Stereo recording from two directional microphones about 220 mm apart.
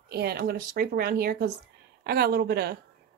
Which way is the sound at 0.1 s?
45° right (ahead or behind).